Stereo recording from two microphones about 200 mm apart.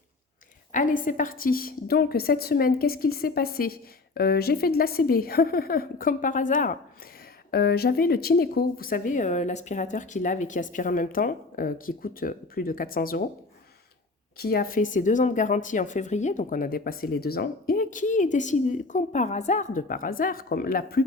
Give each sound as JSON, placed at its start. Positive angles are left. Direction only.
{"t": 0.7, "sound": "a woman's voice", "side_deg": 40}
{"t": 7.5, "sound": "a woman's voice", "side_deg": 50}
{"t": 14.3, "sound": "speech", "side_deg": 50}